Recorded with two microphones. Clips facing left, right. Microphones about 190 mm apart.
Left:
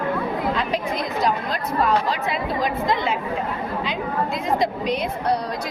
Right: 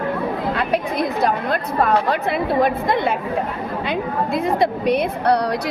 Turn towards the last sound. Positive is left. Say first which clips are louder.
# right 5 dB
turn(degrees=-65)  # may be behind; listen again after turning